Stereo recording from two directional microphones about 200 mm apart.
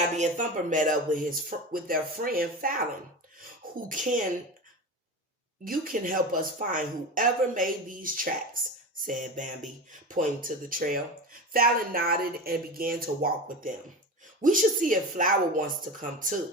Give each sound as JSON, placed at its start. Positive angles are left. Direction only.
{"t": 0.1, "sound": "speech", "side_deg": -40}
{"t": 3.4, "sound": "a sound", "side_deg": -45}
{"t": 5.6, "sound": "a woman's voice", "side_deg": -45}